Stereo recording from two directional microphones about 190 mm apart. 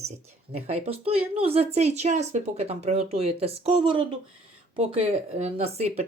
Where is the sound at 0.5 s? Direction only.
30° right (ahead or behind).